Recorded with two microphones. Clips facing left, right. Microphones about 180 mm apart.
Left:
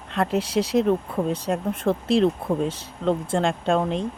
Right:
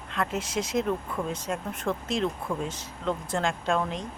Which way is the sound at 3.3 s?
30° left (ahead or behind).